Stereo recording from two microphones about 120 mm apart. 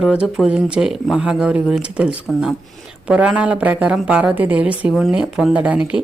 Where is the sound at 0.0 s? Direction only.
5° right (ahead or behind).